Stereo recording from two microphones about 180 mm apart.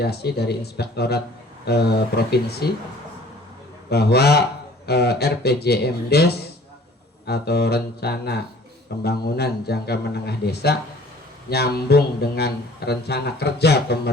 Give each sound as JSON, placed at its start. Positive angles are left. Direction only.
{"t": 0.0, "sound": "a man's voice", "side_deg": 65}
{"t": 3.8, "sound": "a man's voice", "side_deg": 65}